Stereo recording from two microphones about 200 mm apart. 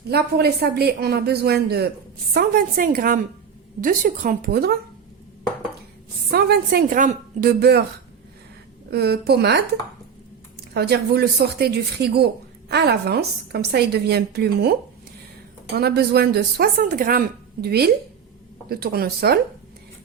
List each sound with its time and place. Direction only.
0.1 s speech: 55° right (ahead or behind)
6.3 s speech: 55° right (ahead or behind)
8.9 s speech: 55° right (ahead or behind)